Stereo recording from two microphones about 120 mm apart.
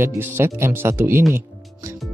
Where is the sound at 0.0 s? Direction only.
20° right (ahead or behind).